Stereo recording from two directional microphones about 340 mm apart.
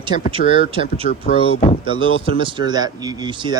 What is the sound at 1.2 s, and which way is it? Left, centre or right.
Speech, left.